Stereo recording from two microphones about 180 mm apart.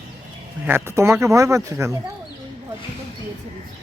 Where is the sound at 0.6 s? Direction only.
15° right (ahead or behind).